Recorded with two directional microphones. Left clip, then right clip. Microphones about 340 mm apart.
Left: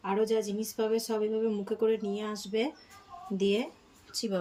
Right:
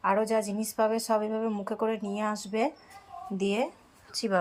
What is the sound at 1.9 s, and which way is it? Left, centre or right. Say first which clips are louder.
Speech: left 2 dB; right.